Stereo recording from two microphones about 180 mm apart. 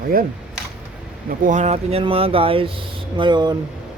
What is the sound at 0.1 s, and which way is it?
Speech, 55° right (ahead or behind).